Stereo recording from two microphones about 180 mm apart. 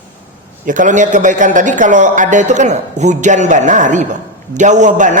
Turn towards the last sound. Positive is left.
turn(degrees=-45)  # may be behind; listen again after turning